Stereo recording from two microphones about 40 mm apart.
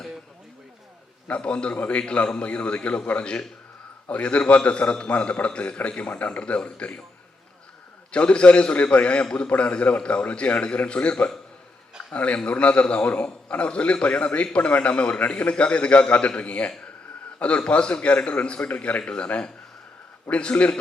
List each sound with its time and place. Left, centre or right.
1.3 s a man's voice: left
8.1 s a man's voice: left